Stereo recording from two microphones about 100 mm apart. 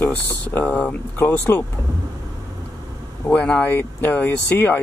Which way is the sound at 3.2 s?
10° left (ahead or behind).